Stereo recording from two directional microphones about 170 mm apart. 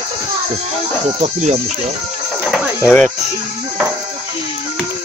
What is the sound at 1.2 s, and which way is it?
Speech, 40° right (ahead or behind).